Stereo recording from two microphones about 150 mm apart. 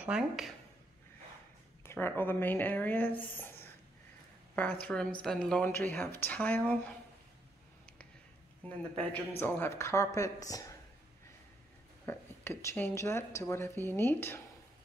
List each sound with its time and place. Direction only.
0.0 s speech: 5° right (ahead or behind)
1.8 s speech: 15° left (ahead or behind)
9.4 s speech: 15° left (ahead or behind)
12.1 s speech: 15° left (ahead or behind)